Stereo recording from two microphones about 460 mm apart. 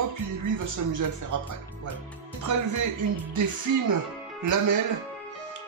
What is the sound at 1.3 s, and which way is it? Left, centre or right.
Speech, right.